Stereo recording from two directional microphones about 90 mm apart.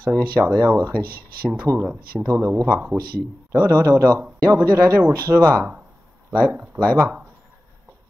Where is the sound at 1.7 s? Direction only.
35° right (ahead or behind).